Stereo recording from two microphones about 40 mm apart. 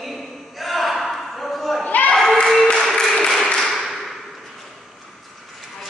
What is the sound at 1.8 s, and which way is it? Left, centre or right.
Children playing, left.